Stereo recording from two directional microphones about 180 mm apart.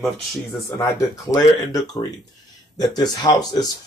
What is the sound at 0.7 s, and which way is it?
Speech, 20° left (ahead or behind).